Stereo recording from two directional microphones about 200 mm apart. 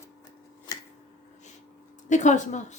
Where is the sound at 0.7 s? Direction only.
20° left (ahead or behind).